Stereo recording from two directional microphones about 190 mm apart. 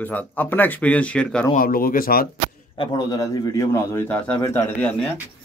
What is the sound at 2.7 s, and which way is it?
Speech, 25° left (ahead or behind).